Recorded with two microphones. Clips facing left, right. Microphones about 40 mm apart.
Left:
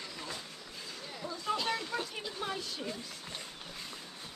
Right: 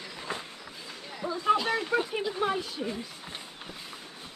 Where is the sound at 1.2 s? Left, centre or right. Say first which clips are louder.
Right 10 dB; right.